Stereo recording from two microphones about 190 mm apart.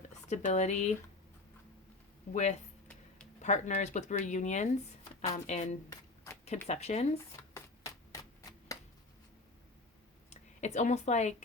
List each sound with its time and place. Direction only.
0.3 s speech: 40° left (ahead or behind)
2.3 s speech: 40° left (ahead or behind)
2.8 s a sound: 5° left (ahead or behind)
3.4 s speech: 40° left (ahead or behind)
7.5 s a sound: 15° left (ahead or behind)
10.2 s speech: 35° left (ahead or behind)